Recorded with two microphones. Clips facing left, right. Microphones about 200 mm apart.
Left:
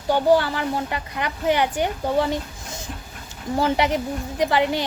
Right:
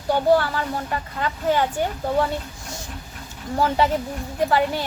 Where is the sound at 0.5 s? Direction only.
20° left (ahead or behind).